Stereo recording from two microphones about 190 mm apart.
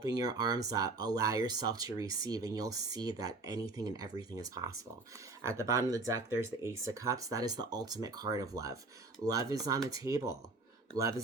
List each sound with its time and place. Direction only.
0.0 s speech: 20° right (ahead or behind)